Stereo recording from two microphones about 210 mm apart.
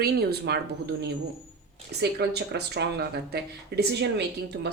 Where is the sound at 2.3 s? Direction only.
50° right (ahead or behind).